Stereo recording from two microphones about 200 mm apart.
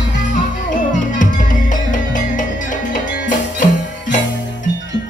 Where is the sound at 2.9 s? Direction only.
40° left (ahead or behind).